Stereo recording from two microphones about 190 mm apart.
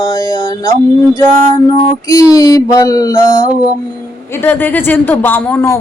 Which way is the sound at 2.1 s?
20° left (ahead or behind).